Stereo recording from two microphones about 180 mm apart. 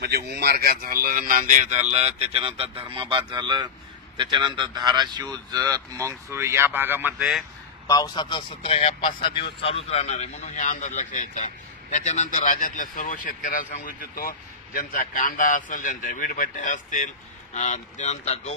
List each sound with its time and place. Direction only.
0.0 s speech: 65° right (ahead or behind); by 7.4 s 5° right (ahead or behind)
7.8 s a man's voice: 20° left (ahead or behind); by 18.5 s 40° left (ahead or behind)